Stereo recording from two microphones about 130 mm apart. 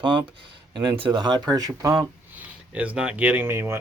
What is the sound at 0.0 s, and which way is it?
Speech, 35° right (ahead or behind).